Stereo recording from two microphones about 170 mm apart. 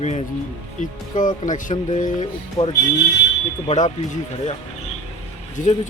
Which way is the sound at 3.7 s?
40° left (ahead or behind).